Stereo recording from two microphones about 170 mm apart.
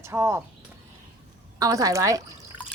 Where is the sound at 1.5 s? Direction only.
20° right (ahead or behind).